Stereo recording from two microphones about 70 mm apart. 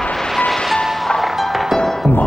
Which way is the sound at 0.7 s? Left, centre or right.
Centre.